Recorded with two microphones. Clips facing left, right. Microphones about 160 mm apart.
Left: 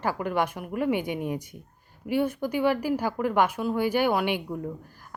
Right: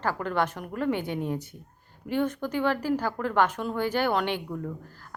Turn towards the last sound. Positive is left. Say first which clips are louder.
# left 2 dB
turn(degrees=15)  # may be behind; listen again after turning